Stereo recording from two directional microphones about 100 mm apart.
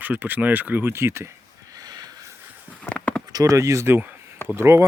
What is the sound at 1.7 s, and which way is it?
Snort, 40° right (ahead or behind).